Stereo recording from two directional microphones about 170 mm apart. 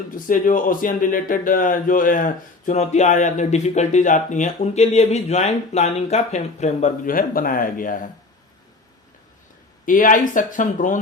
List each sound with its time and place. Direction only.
0.3 s a man's voice: 50° left (ahead or behind)
9.8 s a man's voice: 50° left (ahead or behind)